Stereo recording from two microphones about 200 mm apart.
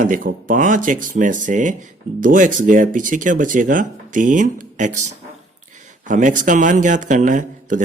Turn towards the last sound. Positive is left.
turn(degrees=-40)  # may be behind; listen again after turning